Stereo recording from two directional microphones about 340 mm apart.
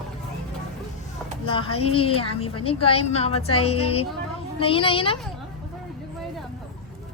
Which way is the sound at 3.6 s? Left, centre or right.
Left.